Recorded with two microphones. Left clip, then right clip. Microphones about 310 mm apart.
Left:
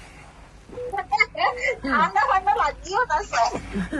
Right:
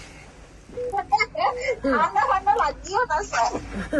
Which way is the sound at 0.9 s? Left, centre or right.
Left.